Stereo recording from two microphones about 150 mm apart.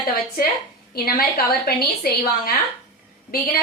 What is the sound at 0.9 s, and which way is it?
Speech, 90° left.